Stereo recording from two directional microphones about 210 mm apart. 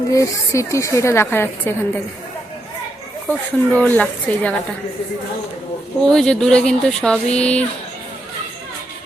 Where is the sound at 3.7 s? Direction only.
5° left (ahead or behind).